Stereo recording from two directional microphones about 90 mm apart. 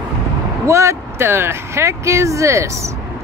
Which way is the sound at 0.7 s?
35° right (ahead or behind).